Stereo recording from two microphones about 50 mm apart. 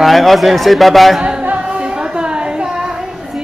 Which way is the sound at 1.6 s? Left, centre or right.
Centre.